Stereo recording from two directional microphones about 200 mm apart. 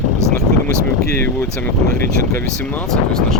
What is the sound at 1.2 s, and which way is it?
Speech, 10° left (ahead or behind).